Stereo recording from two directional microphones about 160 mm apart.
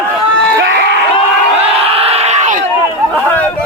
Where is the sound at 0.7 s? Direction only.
90° right.